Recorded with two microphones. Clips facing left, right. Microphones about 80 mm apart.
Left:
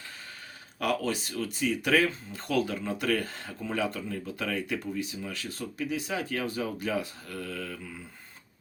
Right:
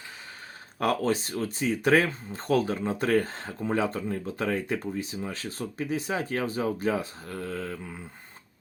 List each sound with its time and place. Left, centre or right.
0.8 s speech: right